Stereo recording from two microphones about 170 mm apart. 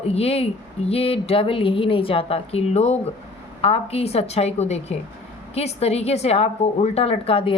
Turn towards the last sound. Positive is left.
turn(degrees=35)  # may be behind; listen again after turning